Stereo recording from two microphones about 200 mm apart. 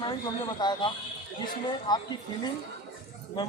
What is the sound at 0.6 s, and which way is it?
Speech, 20° left (ahead or behind).